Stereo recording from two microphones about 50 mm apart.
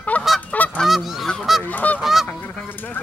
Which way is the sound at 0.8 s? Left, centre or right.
Centre.